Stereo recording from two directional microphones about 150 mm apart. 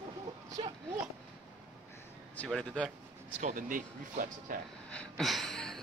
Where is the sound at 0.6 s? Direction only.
35° right (ahead or behind).